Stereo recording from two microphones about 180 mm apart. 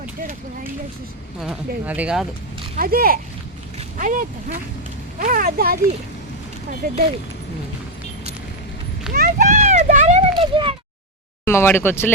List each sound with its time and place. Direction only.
0.0 s a sound: 45° right (ahead or behind)
1.4 s speech: 5° right (ahead or behind)
2.7 s speech: 55° right (ahead or behind)
6.8 s speech: 50° right (ahead or behind)
9.1 s a sound: 40° right (ahead or behind)
10.3 s speech: 30° right (ahead or behind)
11.4 s speech: 15° left (ahead or behind)